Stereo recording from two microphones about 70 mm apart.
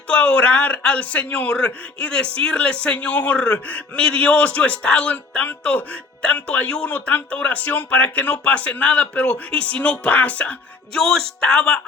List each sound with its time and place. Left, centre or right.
0.1 s a man's voice: centre
10.9 s a man's voice: centre